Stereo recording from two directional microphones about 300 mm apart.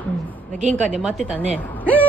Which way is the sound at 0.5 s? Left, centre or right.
Right.